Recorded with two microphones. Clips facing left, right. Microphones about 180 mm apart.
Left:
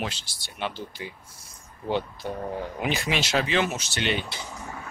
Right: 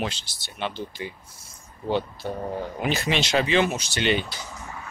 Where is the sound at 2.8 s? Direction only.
10° left (ahead or behind).